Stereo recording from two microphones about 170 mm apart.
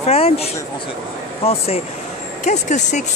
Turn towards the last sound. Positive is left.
turn(degrees=45)  # may be behind; listen again after turning